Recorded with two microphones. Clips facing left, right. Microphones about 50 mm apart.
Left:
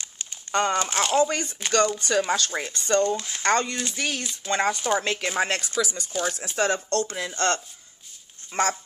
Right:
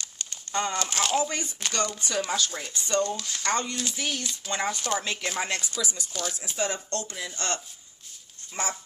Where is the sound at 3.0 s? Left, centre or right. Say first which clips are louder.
Left 5 dB; left.